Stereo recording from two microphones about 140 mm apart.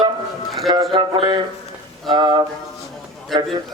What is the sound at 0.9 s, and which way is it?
A man's voice, 35° right (ahead or behind).